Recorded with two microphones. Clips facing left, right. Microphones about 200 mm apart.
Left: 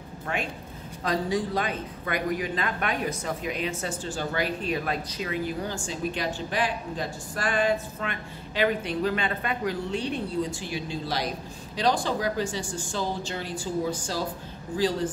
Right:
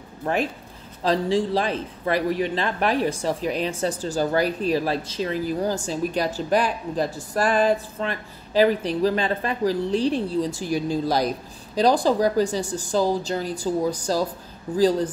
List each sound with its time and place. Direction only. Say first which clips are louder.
1.0 s a man's voice: right 5 dB; 30° right (ahead or behind)